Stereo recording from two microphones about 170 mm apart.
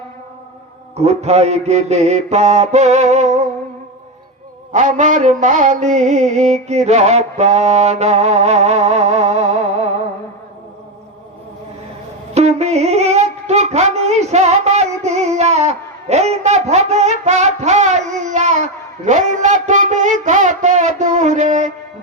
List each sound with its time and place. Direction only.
0.9 s mantra: 40° right (ahead or behind)
4.7 s mantra: 45° right (ahead or behind)
12.3 s a sound: 40° right (ahead or behind)